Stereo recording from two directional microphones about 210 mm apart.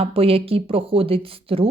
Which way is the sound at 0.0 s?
25° right (ahead or behind).